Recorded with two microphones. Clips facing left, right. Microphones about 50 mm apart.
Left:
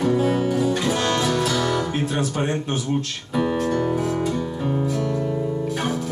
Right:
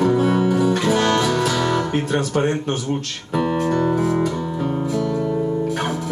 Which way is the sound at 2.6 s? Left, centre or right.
Right.